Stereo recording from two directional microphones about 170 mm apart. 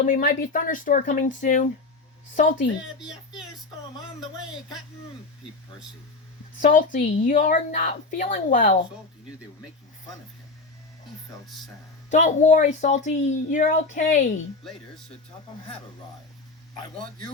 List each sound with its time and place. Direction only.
0.0 s a woman's voice: 55° left (ahead or behind)
2.8 s speech: 5° right (ahead or behind)
6.6 s a woman's voice: 50° left (ahead or behind)
11.4 s speech: centre (ahead or behind)
12.1 s a woman's voice: 45° left (ahead or behind)
16.7 s a man's voice: 25° left (ahead or behind)